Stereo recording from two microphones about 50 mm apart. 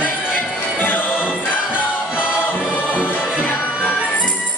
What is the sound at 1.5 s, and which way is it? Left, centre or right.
Music, left.